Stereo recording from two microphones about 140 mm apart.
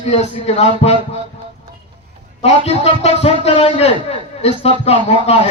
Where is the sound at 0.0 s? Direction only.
50° left (ahead or behind).